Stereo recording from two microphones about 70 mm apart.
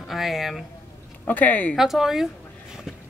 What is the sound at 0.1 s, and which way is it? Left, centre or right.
Speech, centre.